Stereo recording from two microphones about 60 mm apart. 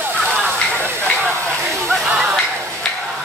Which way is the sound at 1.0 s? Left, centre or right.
Centre.